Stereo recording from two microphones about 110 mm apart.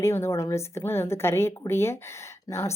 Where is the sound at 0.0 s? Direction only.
25° left (ahead or behind).